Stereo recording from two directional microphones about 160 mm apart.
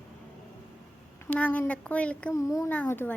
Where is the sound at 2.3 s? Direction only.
20° left (ahead or behind).